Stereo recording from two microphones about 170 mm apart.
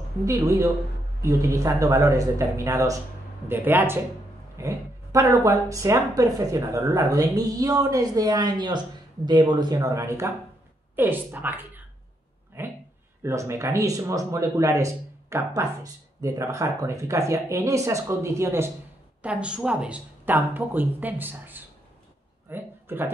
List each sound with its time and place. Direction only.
0.2 s speech: 20° right (ahead or behind)
12.6 s a sound: 15° right (ahead or behind)
13.2 s speech: 15° right (ahead or behind)